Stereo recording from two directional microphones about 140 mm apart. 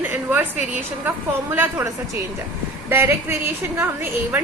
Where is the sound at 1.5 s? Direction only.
15° right (ahead or behind).